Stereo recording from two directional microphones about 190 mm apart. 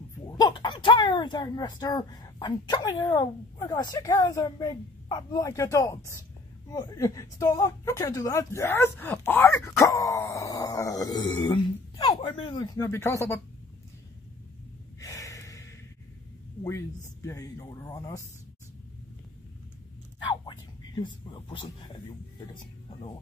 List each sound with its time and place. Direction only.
0.4 s speech: 25° left (ahead or behind)
15.0 s gasp: 15° left (ahead or behind)
16.6 s speech: 15° left (ahead or behind)
20.4 s speech: 25° left (ahead or behind)